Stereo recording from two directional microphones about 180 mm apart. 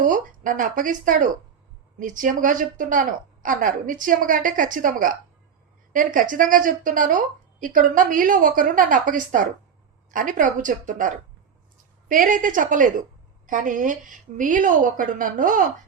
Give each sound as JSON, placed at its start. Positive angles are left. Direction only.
{"t": 0.0, "sound": "a woman's voice", "side_deg": -45}